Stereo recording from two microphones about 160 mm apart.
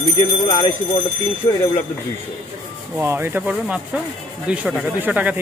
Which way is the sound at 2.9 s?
15° right (ahead or behind).